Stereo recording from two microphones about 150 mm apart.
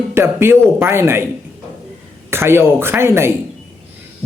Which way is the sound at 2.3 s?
15° right (ahead or behind).